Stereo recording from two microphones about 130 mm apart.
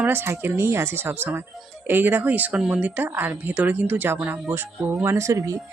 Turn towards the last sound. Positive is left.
turn(degrees=-25)  # may be behind; listen again after turning